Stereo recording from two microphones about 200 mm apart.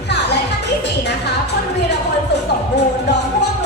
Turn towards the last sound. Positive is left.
turn(degrees=60)  # may be behind; listen again after turning